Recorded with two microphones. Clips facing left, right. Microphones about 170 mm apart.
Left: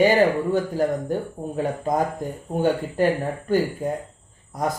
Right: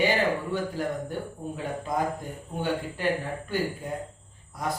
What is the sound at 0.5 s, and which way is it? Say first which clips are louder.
Speech: left 7 dB; 45° left (ahead or behind).